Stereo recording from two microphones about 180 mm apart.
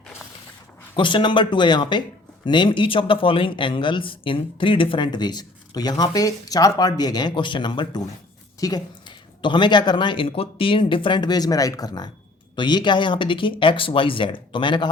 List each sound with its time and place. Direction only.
0.9 s speech: 25° left (ahead or behind)